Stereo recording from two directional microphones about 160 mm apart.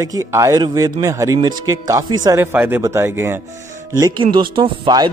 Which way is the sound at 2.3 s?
15° right (ahead or behind).